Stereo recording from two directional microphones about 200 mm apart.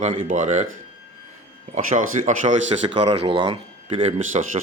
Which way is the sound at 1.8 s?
40° right (ahead or behind).